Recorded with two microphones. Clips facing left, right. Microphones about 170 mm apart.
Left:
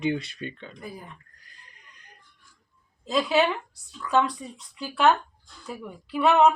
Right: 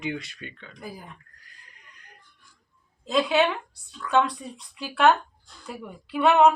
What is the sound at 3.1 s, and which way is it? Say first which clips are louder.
Speech: right 1 dB; centre (ahead or behind).